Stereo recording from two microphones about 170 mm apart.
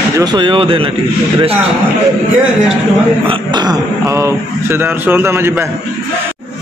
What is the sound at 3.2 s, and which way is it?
A man's voice, 25° right (ahead or behind).